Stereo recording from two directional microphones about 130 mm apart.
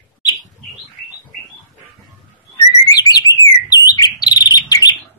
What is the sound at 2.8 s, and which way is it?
Bird, 30° left (ahead or behind).